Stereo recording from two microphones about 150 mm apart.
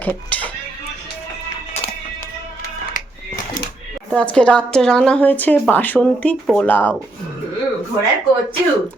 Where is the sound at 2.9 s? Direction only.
65° left (ahead or behind).